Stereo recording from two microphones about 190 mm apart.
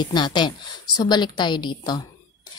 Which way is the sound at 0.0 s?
25° left (ahead or behind).